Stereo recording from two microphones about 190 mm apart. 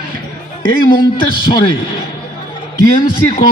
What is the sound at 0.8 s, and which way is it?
Speech, 45° left (ahead or behind).